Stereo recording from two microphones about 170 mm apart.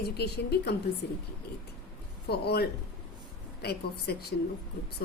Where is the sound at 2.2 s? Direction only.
70° left (ahead or behind).